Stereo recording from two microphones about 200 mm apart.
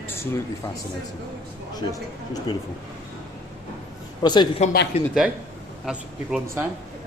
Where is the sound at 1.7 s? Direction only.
20° left (ahead or behind).